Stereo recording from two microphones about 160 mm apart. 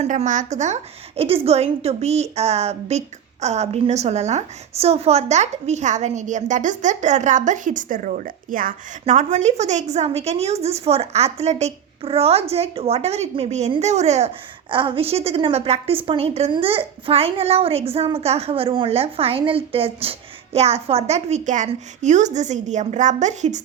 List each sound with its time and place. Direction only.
0.0 s a woman's voice: 45° right (ahead or behind)
14.7 s a woman's voice: 30° right (ahead or behind)